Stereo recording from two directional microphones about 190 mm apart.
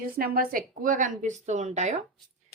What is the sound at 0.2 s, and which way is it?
Speech, 50° right (ahead or behind).